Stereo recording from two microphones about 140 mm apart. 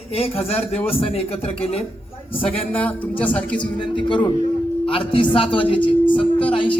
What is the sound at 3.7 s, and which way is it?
Speech, 35° left (ahead or behind).